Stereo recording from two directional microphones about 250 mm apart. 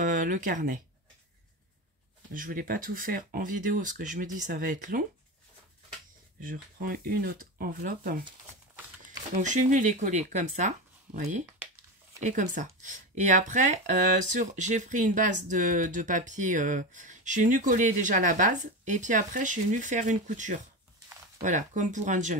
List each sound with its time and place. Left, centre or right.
0.0 s speech: right
2.3 s speech: right
6.4 s speech: right
9.3 s speech: right